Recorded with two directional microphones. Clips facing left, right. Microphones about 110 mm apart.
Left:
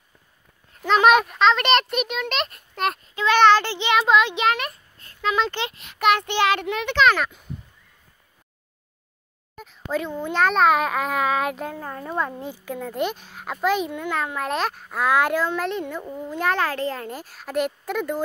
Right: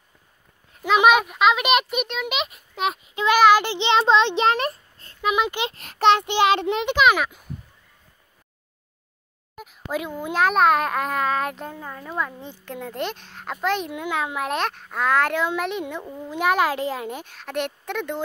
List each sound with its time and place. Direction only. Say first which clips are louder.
0.8 s a child's voice: even; 5° right (ahead or behind); by 5.1 s 35° right (ahead or behind)
5.2 s speech: right 1 dB; 15° right (ahead or behind)
5.9 s a child's voice: right 2 dB; 25° right (ahead or behind)
7.0 s a child's voice: left 1 dB; 10° right (ahead or behind)
9.6 s a child's voice: left 2 dB; 10° right (ahead or behind)
11.8 s speech: left 3 dB; 25° left (ahead or behind)
12.4 s a child's voice: left 3 dB; 5° left (ahead or behind)
13.9 s a child's voice: even; 10° right (ahead or behind); by 15.4 s 10° left (ahead or behind)
15.4 s a child's voice: even; 5° right (ahead or behind)
16.3 s a child's voice: right 3 dB; 5° right (ahead or behind)